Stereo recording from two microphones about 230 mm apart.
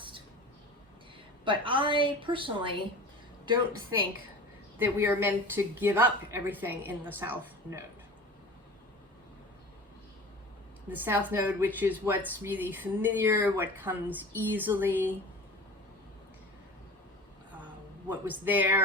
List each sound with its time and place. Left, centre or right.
1.5 s a woman's voice: right
4.8 s a woman's voice: centre
10.8 s a woman's voice: centre
18.1 s a woman's voice: centre